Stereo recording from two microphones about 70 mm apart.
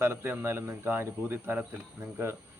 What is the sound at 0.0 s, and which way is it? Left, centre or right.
A man's voice, right.